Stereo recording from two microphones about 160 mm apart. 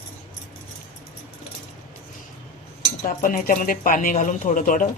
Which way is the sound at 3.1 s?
60° left (ahead or behind).